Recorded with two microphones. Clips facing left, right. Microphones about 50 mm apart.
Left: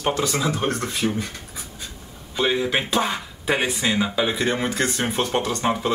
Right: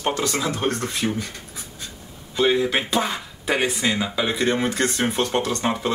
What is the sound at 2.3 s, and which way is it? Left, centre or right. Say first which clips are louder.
Speech: right 2 dB; centre.